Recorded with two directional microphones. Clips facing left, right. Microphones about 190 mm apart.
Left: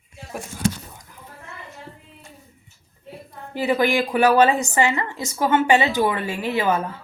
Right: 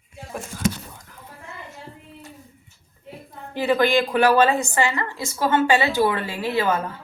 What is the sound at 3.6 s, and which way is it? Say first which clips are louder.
A woman's voice: right 1 dB; 15° left (ahead or behind).